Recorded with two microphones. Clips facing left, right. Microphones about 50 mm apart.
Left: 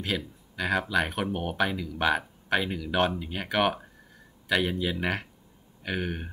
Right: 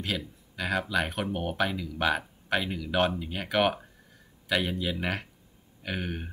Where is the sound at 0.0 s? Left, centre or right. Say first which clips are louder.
Left 2 dB; centre.